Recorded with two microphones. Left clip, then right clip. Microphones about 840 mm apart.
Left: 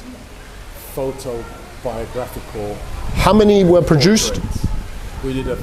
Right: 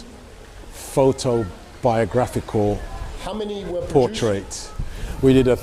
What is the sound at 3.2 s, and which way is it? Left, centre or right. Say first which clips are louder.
Speech: left 17 dB; left.